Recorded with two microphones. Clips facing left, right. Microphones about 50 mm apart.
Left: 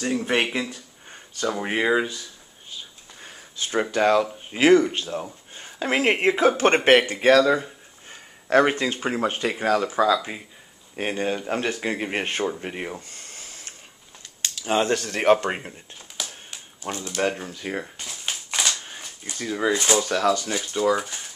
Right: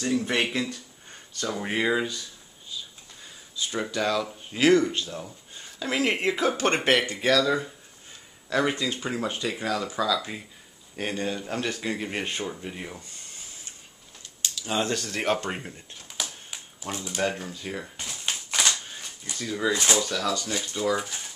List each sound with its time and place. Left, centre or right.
0.0 s speech: left
2.7 s a sound: left
3.9 s speech: left
13.1 s a sound: left
14.6 s speech: left
16.9 s speech: centre
17.2 s speech: centre
17.5 s speech: left
17.9 s typewriter: centre
18.9 s a sound: left
20.1 s speech: left
20.5 s speech: left
20.9 s speech: centre